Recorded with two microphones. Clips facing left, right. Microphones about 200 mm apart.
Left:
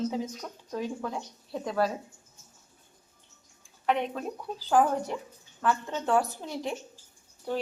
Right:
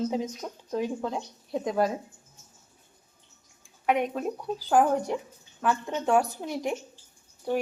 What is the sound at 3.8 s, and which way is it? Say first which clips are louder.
Speech: right 3 dB; 10° right (ahead or behind).